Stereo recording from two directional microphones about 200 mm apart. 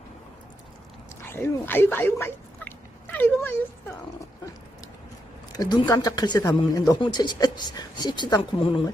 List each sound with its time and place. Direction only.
1.3 s speech: 10° left (ahead or behind)
5.5 s speech: 20° left (ahead or behind)